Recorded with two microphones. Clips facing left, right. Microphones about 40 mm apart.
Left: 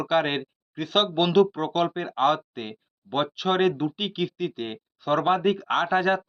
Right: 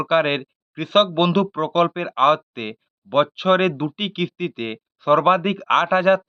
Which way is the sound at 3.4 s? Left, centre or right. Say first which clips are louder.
Right 5 dB; right.